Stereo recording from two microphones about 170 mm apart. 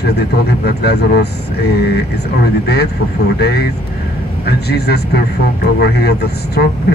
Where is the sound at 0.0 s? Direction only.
70° left (ahead or behind).